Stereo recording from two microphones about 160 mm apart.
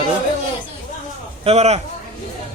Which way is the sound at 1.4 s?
40° right (ahead or behind).